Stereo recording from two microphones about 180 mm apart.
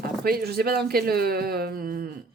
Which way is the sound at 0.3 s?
55° right (ahead or behind).